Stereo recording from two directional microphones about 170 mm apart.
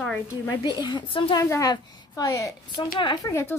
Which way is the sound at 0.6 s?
25° left (ahead or behind).